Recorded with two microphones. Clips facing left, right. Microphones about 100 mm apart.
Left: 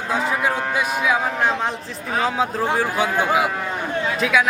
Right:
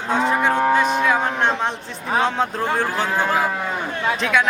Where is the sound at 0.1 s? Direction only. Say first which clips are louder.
Right 3 dB; 5° left (ahead or behind).